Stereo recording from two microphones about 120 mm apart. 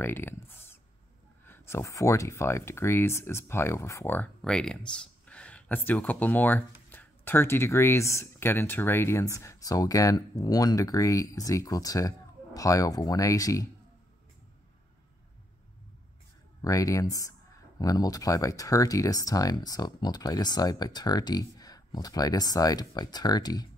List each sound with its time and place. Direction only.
0.0 s speech: 20° left (ahead or behind)
4.4 s speech: 5° left (ahead or behind); by 13.7 s 25° left (ahead or behind)
16.6 s speech: 30° left (ahead or behind)